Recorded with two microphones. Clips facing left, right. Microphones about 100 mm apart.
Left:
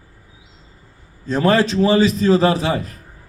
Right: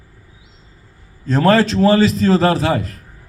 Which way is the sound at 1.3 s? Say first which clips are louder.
Right 2 dB; 15° left (ahead or behind).